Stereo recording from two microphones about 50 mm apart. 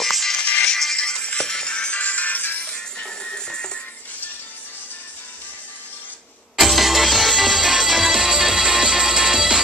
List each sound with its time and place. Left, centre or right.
0.0 s music: centre
0.4 s music: left
6.5 s music: centre